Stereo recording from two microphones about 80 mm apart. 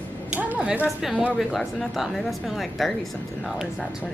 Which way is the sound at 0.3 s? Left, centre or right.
Centre.